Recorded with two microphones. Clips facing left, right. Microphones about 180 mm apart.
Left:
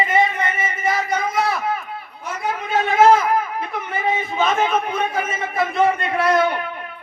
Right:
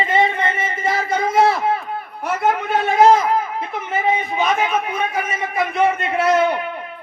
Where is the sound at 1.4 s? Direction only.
30° right (ahead or behind).